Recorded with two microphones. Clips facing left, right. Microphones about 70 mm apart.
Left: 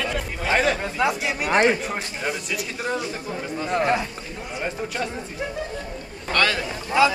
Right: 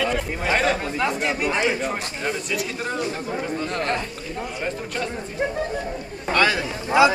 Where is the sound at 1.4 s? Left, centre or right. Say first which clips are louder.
Left 5 dB; left.